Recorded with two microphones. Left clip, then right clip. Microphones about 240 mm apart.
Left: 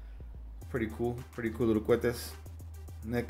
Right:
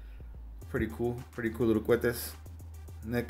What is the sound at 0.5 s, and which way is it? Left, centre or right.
Speech, centre.